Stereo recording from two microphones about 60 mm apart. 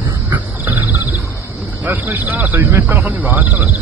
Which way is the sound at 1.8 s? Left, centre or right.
Right.